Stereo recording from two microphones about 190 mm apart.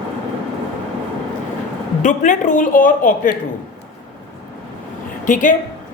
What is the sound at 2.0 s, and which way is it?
A man's voice, 40° left (ahead or behind).